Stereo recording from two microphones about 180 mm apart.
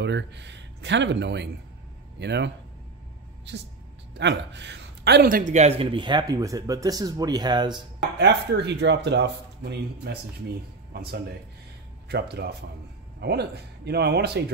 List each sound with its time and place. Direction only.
0.0 s a man's voice: 75° right (ahead or behind); by 7.7 s 25° right (ahead or behind)
8.2 s speech: 70° right (ahead or behind)